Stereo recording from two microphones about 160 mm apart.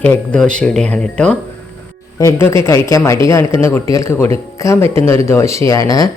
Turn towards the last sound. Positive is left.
turn(degrees=20)  # may be behind; listen again after turning